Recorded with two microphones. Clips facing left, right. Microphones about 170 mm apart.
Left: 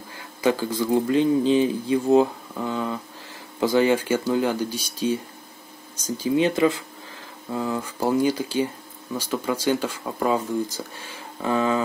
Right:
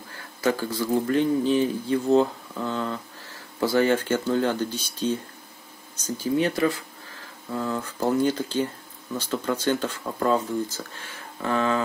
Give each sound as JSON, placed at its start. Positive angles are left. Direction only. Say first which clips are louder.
{"t": 0.1, "sound": "speech", "louder": "left 3 dB", "side_deg": 15}
{"t": 6.2, "sound": "speech", "louder": "left 3 dB", "side_deg": 20}